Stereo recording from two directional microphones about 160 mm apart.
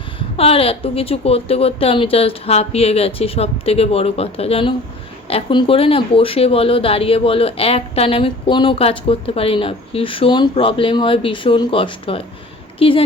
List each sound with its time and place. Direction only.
0.2 s speech: 35° left (ahead or behind)